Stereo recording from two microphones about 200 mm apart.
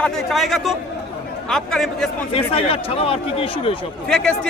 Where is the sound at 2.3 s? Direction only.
30° left (ahead or behind).